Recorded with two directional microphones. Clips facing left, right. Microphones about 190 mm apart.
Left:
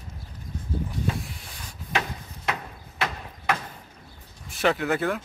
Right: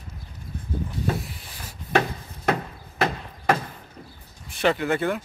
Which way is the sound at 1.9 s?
50° right (ahead or behind).